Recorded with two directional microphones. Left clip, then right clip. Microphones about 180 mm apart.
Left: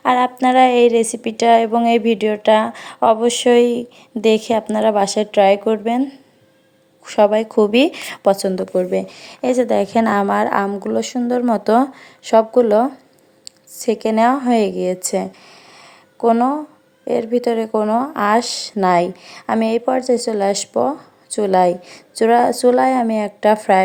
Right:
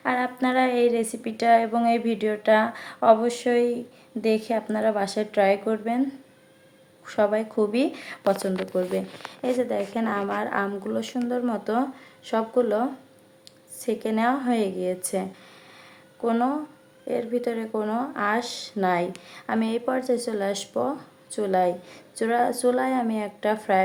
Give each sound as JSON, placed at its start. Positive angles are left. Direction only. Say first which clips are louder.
{"t": 0.0, "sound": "speech", "louder": "left 10 dB", "side_deg": 40}